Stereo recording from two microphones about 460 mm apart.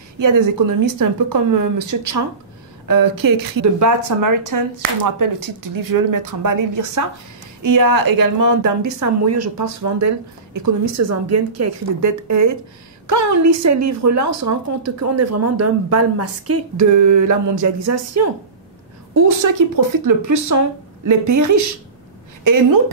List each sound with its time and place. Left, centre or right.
0.2 s a woman's voice: right
19.4 s a woman's voice: right